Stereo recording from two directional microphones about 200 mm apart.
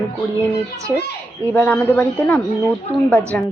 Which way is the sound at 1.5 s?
10° left (ahead or behind).